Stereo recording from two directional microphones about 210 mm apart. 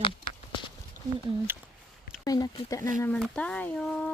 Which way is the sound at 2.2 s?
20° left (ahead or behind).